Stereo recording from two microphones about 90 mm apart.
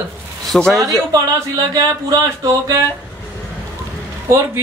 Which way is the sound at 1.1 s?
40° right (ahead or behind).